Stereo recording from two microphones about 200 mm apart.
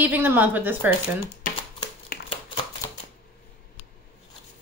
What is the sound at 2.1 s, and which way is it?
Hands, 45° left (ahead or behind).